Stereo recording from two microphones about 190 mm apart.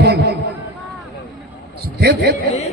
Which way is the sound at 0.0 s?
60° right (ahead or behind).